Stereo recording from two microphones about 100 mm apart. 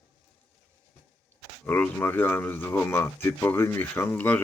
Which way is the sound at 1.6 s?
15° left (ahead or behind).